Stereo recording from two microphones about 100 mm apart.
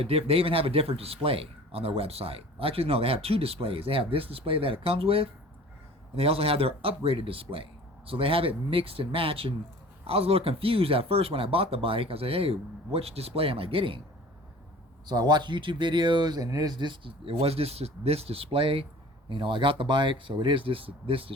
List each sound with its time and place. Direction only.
0.0 s speech: 75° right (ahead or behind)
10.0 s speech: 80° right; by 14.0 s 65° right (ahead or behind)
15.0 s speech: 45° right (ahead or behind); by 18.9 s 70° right (ahead or behind)
19.3 s speech: 55° right (ahead or behind)